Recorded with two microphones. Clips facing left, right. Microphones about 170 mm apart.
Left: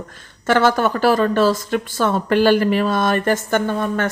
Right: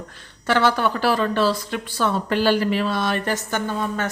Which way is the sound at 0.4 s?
45° left (ahead or behind).